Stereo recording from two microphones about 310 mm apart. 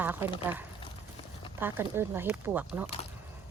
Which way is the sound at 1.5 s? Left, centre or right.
Centre.